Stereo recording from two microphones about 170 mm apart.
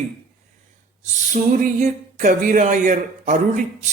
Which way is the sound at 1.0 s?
50° right (ahead or behind).